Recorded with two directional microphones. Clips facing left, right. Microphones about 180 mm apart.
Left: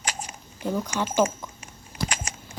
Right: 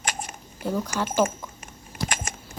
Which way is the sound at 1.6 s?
50° right (ahead or behind).